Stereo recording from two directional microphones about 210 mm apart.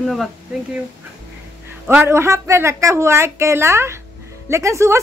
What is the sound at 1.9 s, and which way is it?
A woman's voice, 10° right (ahead or behind).